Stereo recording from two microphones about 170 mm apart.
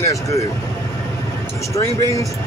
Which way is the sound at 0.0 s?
20° left (ahead or behind).